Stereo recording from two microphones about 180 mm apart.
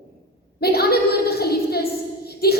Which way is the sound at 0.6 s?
60° left (ahead or behind).